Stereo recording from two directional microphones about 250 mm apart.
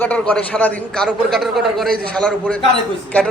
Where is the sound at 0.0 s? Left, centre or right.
Centre.